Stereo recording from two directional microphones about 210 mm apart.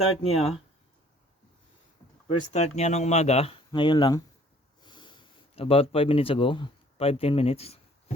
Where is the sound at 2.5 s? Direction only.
30° left (ahead or behind).